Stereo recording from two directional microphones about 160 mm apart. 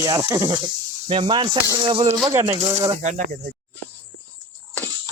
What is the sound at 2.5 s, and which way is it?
Speech, 45° right (ahead or behind).